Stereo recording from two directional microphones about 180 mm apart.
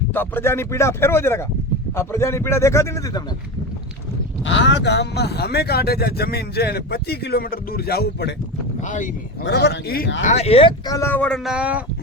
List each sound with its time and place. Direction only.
0.1 s speech: 10° left (ahead or behind)
4.4 s speech: 90° left; by 8.3 s 60° left (ahead or behind)
9.4 s a man's voice: 70° left (ahead or behind)
10.2 s speech: 35° left (ahead or behind); by 11.3 s 10° left (ahead or behind)
11.4 s speech: 5° right (ahead or behind)